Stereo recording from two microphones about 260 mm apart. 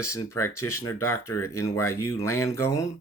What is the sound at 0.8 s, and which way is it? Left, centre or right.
Speech, centre.